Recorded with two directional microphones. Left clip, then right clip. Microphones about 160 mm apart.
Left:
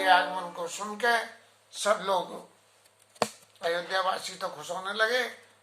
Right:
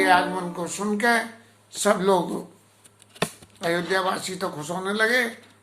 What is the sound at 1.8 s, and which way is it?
Speech, 15° right (ahead or behind).